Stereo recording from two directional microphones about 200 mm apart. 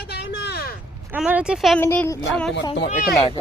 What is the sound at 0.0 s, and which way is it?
Vehicle, 55° left (ahead or behind).